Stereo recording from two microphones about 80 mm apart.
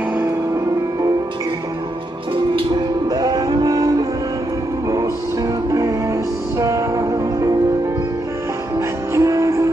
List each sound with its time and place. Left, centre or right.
3.1 s music: right
5.7 s music: right
9.1 s music: right